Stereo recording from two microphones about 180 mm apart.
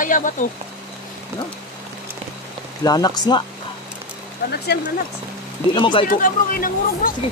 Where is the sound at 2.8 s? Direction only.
20° left (ahead or behind).